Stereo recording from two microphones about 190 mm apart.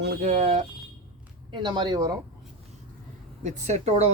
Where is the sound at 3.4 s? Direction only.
35° right (ahead or behind).